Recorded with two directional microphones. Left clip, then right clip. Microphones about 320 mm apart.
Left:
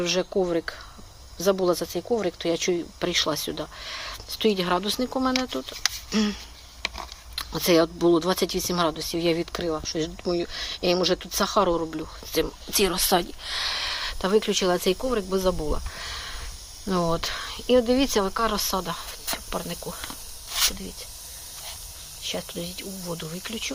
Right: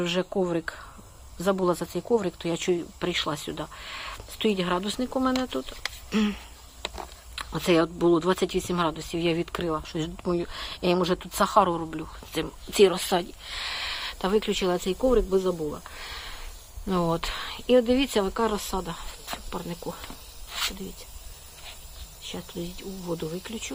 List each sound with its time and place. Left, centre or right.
0.0 s speech: centre
22.2 s speech: centre